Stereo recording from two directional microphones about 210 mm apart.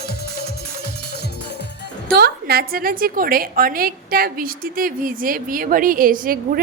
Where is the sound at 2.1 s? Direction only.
45° right (ahead or behind).